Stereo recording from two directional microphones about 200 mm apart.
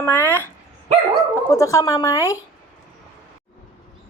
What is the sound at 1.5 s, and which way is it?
Speech, 15° left (ahead or behind).